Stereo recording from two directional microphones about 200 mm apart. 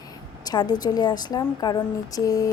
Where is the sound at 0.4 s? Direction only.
20° left (ahead or behind).